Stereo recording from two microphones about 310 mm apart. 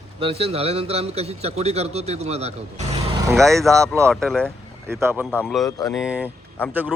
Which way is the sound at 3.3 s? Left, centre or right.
Centre.